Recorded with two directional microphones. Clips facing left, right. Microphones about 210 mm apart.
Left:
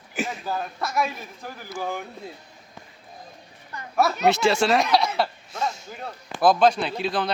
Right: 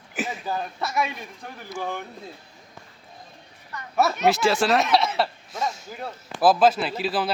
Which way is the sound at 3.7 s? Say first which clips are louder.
Even; 30° left (ahead or behind).